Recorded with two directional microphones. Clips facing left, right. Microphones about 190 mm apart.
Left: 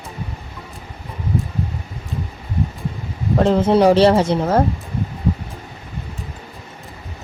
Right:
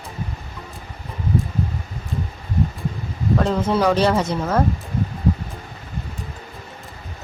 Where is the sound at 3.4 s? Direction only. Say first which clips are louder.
Left 7 dB; 30° left (ahead or behind).